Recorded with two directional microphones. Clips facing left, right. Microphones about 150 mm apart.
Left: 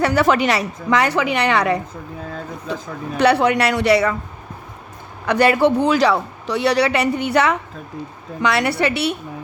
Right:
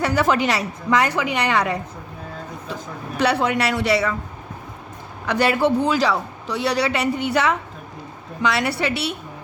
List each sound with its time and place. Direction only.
0.0 s a woman's voice: 65° left (ahead or behind)
3.2 s a man's voice: 65° left (ahead or behind)
5.2 s a man's voice: 55° left (ahead or behind)